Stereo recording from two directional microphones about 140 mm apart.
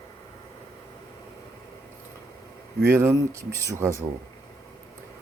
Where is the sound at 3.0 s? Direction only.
20° right (ahead or behind).